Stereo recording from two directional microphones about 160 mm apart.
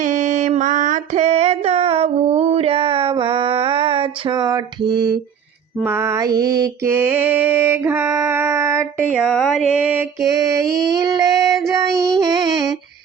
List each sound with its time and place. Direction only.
0.0 s music: 50° right (ahead or behind); by 5.1 s 30° right (ahead or behind)
5.8 s mantra: 15° right (ahead or behind)
9.1 s mantra: centre (ahead or behind)
10.3 s child singing: 20° right (ahead or behind)